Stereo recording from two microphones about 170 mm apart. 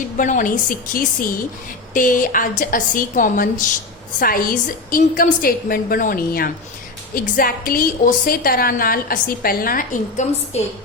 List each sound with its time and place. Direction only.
0.2 s a woman's voice: 50° left (ahead or behind)
10.5 s a woman's voice: 40° left (ahead or behind)